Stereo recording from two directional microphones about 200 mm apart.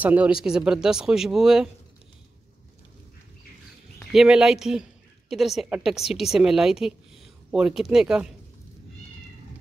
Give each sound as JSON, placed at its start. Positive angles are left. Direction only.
{"t": 0.0, "sound": "a woman's voice", "side_deg": -5}
{"t": 4.1, "sound": "a woman's voice", "side_deg": 0}